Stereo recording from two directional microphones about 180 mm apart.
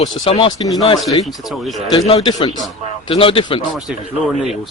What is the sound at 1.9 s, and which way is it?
A man's voice, 30° left (ahead or behind).